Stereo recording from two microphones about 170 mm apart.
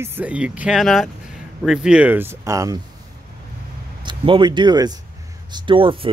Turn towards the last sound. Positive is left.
turn(degrees=-30)  # may be behind; listen again after turning